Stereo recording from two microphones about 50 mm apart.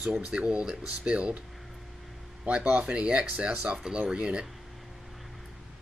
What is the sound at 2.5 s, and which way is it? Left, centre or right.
Speech, right.